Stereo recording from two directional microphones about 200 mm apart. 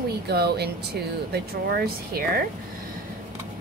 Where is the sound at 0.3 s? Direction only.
55° right (ahead or behind).